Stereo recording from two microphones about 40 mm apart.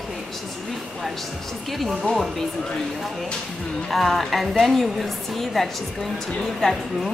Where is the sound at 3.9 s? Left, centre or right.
Centre.